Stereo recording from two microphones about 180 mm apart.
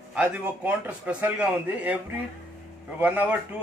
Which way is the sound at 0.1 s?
10° right (ahead or behind).